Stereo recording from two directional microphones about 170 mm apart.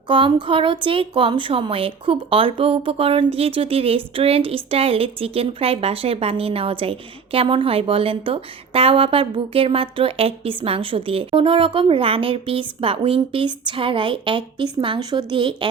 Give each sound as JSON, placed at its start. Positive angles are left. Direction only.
{"t": 0.1, "sound": "a woman's voice", "side_deg": -30}